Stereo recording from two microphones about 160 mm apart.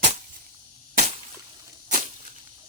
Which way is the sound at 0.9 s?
45° right (ahead or behind).